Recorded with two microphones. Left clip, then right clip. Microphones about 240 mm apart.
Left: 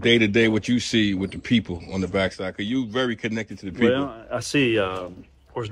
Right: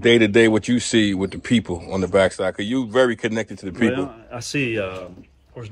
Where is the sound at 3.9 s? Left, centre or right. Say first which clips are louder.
Left 2 dB; centre.